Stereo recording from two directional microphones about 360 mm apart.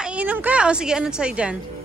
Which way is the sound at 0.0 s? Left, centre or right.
Centre.